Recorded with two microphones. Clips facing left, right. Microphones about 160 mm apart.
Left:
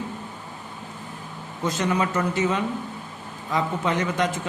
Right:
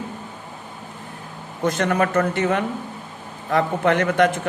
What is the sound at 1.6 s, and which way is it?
Speech, 55° right (ahead or behind).